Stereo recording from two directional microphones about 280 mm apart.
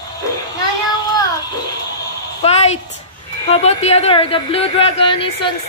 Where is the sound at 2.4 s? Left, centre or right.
Left.